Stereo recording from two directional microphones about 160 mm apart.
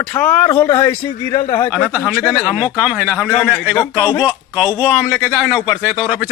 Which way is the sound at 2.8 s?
5° right (ahead or behind).